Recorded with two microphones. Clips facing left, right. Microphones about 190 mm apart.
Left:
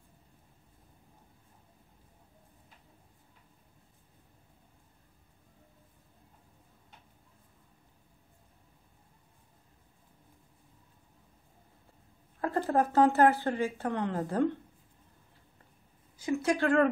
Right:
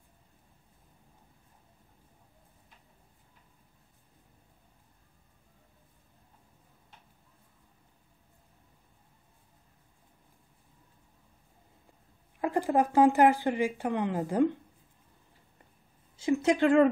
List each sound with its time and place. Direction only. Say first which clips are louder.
12.4 s speech: right 2 dB; 10° right (ahead or behind)
16.2 s a woman's voice: right 4 dB; 25° right (ahead or behind)